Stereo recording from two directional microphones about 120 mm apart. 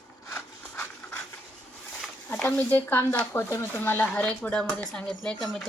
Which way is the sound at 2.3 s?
15° left (ahead or behind).